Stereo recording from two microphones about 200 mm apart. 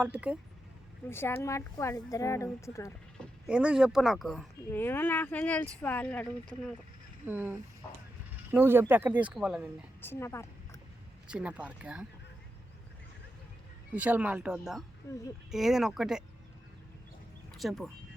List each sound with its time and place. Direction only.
0.0 s speech: 5° right (ahead or behind)
1.1 s speech: 10° left (ahead or behind)
3.4 s speech: 5° right (ahead or behind)
7.3 s speech: 10° right (ahead or behind)
10.0 s speech: 10° left (ahead or behind)
11.3 s speech: 5° right (ahead or behind)
13.9 s speech: 5° right (ahead or behind)
17.5 s speech: centre (ahead or behind)